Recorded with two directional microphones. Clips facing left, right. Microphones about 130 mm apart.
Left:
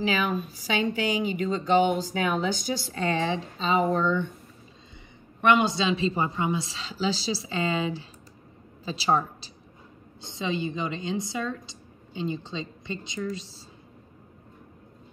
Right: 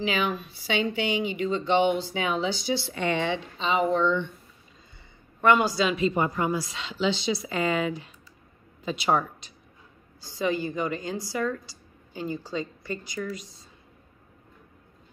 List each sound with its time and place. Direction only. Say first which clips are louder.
0.0 s speech: left 1 dB; 45° left (ahead or behind)
5.4 s a woman's voice: right 1 dB; 20° left (ahead or behind)